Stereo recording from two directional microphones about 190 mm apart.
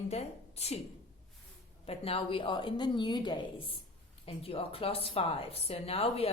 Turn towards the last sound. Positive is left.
turn(degrees=30)  # may be behind; listen again after turning